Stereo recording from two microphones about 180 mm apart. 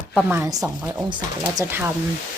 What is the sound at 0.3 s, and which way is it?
Speech, 20° right (ahead or behind).